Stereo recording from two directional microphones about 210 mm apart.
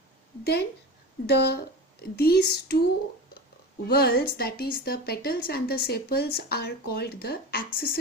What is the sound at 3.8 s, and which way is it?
A woman's voice, 45° left (ahead or behind).